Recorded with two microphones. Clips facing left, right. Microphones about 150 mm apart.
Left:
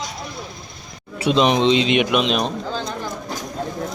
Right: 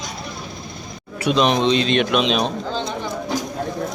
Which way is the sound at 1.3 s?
20° left (ahead or behind).